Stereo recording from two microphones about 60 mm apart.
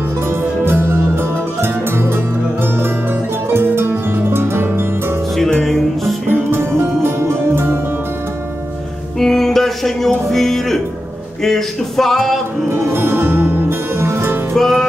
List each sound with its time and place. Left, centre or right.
0.7 s music: right
3.5 s music: right
5.6 s music: centre
6.2 s music: right
9.2 s a sound: centre
11.4 s music: centre
12.6 s music: right
14.5 s music: centre